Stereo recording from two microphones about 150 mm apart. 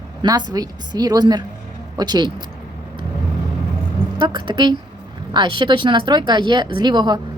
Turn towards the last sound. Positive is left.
turn(degrees=-30)  # may be behind; listen again after turning